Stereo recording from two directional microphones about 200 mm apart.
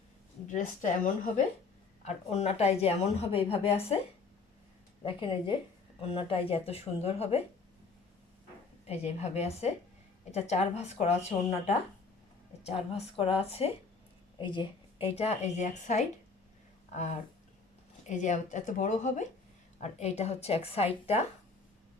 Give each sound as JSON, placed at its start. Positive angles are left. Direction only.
{"t": 0.4, "sound": "a woman's voice", "side_deg": 40}
{"t": 5.0, "sound": "speech", "side_deg": 25}
{"t": 8.9, "sound": "a woman's voice", "side_deg": 30}